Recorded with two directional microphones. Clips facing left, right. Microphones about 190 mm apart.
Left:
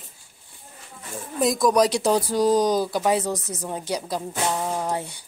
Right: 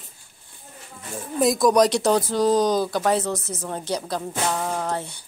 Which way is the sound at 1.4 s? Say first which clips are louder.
Right 2 dB; centre (ahead or behind).